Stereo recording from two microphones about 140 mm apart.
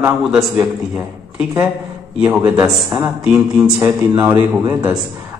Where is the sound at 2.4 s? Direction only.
20° right (ahead or behind).